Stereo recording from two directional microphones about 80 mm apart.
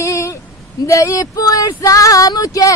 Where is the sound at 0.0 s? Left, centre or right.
Left.